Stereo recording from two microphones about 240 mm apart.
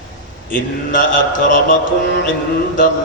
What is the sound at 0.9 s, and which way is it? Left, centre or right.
Speech, left.